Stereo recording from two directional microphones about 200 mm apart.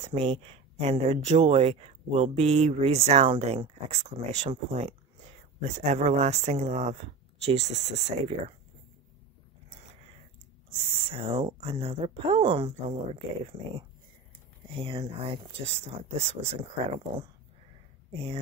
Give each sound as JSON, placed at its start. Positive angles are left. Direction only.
{"t": 0.1, "sound": "speech", "side_deg": -30}
{"t": 11.1, "sound": "speech", "side_deg": -25}
{"t": 18.1, "sound": "speech", "side_deg": -25}